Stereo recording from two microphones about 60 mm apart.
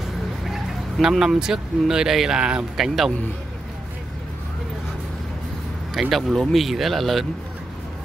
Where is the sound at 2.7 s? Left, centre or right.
Centre.